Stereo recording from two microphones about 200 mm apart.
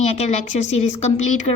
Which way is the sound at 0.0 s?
35° left (ahead or behind).